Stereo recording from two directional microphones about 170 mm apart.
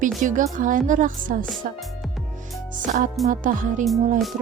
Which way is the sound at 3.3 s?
50° right (ahead or behind).